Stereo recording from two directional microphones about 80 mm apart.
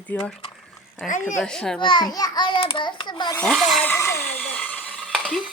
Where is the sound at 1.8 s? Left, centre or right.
Left.